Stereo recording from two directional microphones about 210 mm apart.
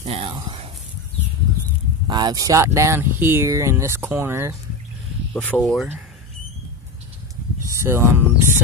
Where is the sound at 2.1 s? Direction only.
20° right (ahead or behind).